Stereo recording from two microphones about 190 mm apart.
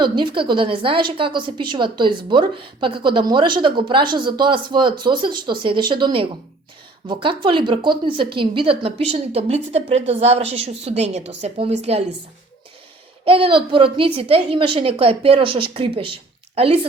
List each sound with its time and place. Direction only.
0.0 s a woman's voice: 25° right (ahead or behind)
13.2 s a woman's voice: 30° right (ahead or behind)